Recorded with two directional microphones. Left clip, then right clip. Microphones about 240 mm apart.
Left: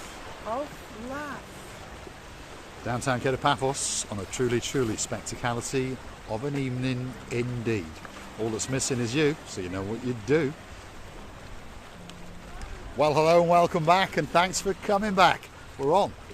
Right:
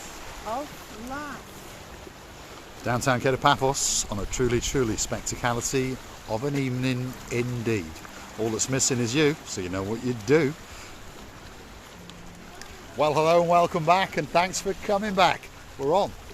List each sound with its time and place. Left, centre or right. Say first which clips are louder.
2.8 s speech: right 4 dB; right
13.0 s speech: even; centre